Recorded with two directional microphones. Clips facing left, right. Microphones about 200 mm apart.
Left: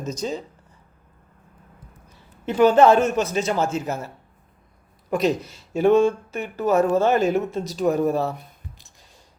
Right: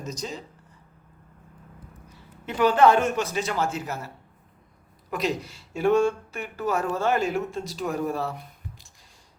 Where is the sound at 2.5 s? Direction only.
45° left (ahead or behind).